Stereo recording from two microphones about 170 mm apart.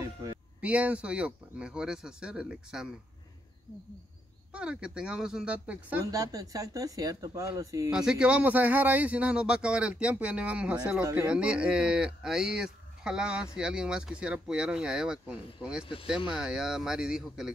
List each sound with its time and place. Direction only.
0.0 s a sound: 20° right (ahead or behind)
0.6 s speech: 10° right (ahead or behind)
4.5 s speech: 5° right (ahead or behind)
6.1 s speech: 20° right (ahead or behind)
7.9 s speech: 5° right (ahead or behind)